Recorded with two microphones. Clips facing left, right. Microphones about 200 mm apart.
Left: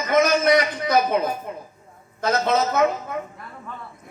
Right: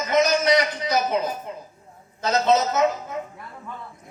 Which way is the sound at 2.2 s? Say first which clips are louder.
Right 1 dB; 55° left (ahead or behind).